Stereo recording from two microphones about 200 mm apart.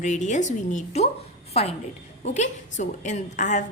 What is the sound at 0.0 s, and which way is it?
A woman's voice, 35° left (ahead or behind).